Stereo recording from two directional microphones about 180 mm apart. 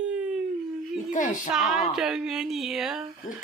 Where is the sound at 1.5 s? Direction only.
5° right (ahead or behind).